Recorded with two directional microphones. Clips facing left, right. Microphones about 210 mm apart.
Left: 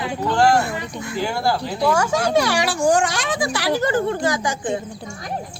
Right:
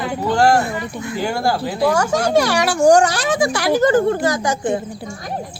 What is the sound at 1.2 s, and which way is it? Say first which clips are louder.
Speech: right 2 dB; 50° right (ahead or behind).